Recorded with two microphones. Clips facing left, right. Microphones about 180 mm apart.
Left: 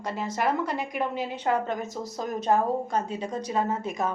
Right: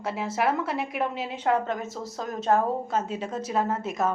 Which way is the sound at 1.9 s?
15° left (ahead or behind).